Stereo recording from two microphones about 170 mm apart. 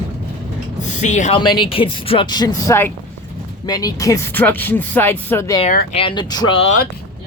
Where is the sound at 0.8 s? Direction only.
45° left (ahead or behind).